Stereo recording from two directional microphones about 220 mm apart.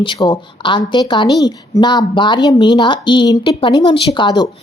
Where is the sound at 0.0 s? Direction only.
20° left (ahead or behind).